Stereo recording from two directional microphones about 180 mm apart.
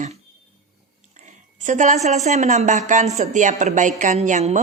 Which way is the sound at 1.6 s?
40° right (ahead or behind).